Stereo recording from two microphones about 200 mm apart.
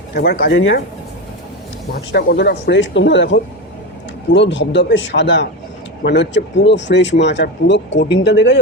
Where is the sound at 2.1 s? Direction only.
60° left (ahead or behind).